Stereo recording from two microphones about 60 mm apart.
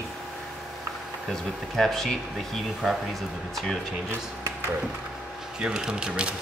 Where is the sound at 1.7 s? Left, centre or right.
Centre.